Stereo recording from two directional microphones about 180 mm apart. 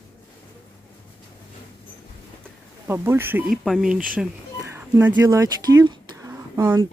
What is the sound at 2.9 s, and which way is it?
Speech, 15° right (ahead or behind).